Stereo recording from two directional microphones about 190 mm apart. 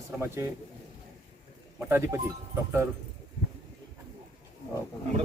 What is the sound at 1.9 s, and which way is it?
Speech, 15° right (ahead or behind).